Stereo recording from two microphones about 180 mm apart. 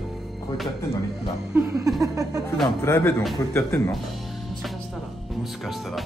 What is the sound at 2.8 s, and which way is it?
Speech, 15° left (ahead or behind).